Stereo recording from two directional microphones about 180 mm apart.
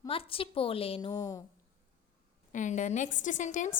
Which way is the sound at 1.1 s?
20° left (ahead or behind).